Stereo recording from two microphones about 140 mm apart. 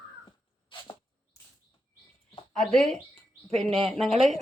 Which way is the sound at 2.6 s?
5° left (ahead or behind).